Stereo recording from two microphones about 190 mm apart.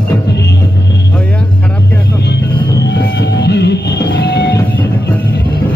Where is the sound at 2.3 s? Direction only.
65° left (ahead or behind).